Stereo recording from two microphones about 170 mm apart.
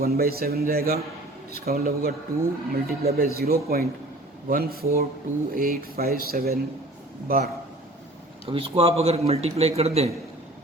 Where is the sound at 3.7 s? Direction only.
65° right (ahead or behind).